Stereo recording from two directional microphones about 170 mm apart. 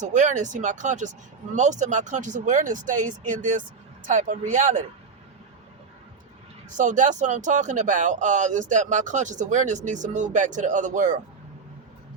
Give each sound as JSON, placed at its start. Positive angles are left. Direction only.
{"t": 0.0, "sound": "speech", "side_deg": -45}
{"t": 6.7, "sound": "speech", "side_deg": -45}